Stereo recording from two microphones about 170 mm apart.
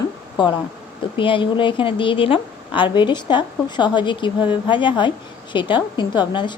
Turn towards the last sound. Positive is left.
turn(degrees=25)  # may be behind; listen again after turning